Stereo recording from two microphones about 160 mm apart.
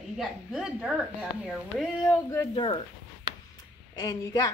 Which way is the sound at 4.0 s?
25° left (ahead or behind).